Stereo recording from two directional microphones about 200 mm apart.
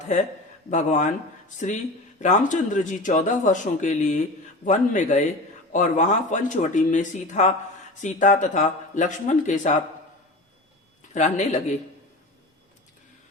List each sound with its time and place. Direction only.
0.7 s speech: 40° left (ahead or behind)
11.1 s speech: 35° left (ahead or behind)